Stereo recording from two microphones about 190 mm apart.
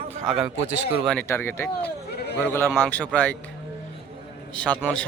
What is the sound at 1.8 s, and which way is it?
Bleat, 60° left (ahead or behind).